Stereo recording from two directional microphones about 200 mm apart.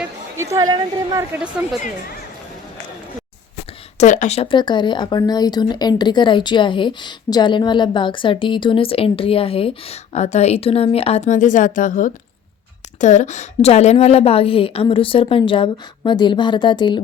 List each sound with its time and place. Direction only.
0.5 s a woman's voice: 15° right (ahead or behind)
3.9 s speech: 35° left (ahead or behind)